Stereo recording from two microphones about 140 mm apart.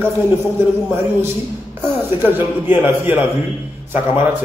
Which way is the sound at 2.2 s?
15° right (ahead or behind).